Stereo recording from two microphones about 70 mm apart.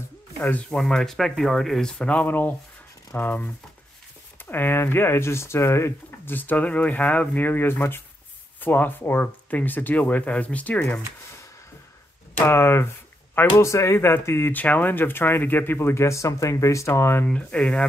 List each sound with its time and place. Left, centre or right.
0.4 s speech: left
0.7 s speech: centre; by 6.3 s left
6.3 s speech: left
12.4 s speech: left
13.7 s speech: left
13.9 s speech: left
14.5 s speech: left
17.3 s speech: centre